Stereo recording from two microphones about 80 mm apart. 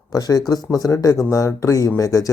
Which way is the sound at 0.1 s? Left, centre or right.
Left.